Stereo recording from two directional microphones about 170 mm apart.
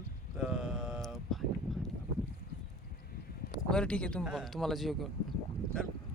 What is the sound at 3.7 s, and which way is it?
Speech, 5° left (ahead or behind).